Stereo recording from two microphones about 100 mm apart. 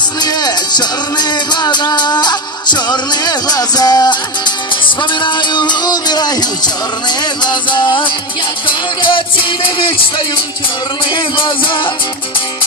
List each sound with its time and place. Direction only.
0.2 s music: 45° left (ahead or behind)
11.3 s music: 55° left (ahead or behind)